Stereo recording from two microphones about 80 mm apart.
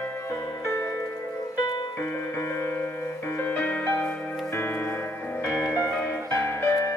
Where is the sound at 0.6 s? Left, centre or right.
Left.